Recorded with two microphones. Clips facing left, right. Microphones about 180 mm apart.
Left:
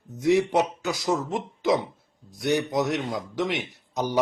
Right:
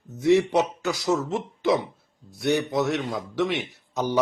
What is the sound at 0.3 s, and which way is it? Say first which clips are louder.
A man's voice: right 1 dB; 15° left (ahead or behind).